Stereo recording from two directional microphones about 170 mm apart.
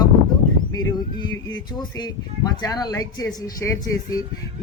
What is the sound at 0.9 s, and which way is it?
Speech, 25° left (ahead or behind).